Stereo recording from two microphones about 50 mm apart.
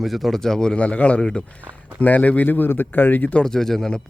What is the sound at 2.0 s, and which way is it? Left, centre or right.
Speech, left.